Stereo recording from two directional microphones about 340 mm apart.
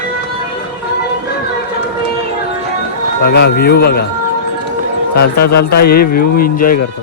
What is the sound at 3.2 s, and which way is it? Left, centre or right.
Speech, left.